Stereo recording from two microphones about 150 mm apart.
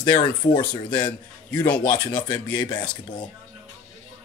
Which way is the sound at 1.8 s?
30° left (ahead or behind).